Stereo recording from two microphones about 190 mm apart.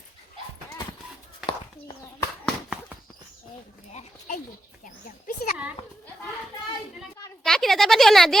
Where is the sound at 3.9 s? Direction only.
40° left (ahead or behind).